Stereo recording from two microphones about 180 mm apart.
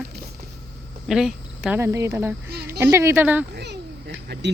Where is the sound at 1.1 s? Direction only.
5° right (ahead or behind).